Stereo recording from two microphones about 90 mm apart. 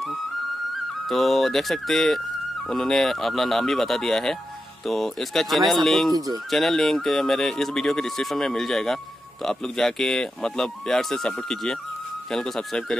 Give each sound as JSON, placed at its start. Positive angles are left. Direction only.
{"t": 1.0, "sound": "speech", "side_deg": 0}
{"t": 6.1, "sound": "speech", "side_deg": -45}
{"t": 6.5, "sound": "speech", "side_deg": 5}